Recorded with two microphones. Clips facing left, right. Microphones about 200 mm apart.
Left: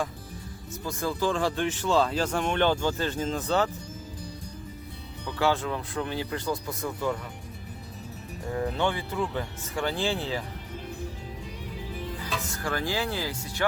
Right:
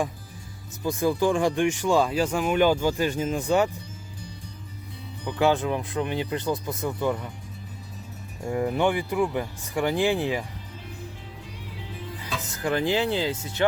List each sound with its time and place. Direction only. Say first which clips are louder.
0.9 s speech: right 5 dB; 15° right (ahead or behind)
5.2 s speech: right 4 dB; 15° right (ahead or behind)
8.5 s speech: right 4 dB; 15° right (ahead or behind)
12.4 s speech: right 8 dB; 20° right (ahead or behind)